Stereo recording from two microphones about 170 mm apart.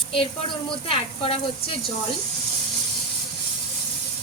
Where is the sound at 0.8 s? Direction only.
35° left (ahead or behind).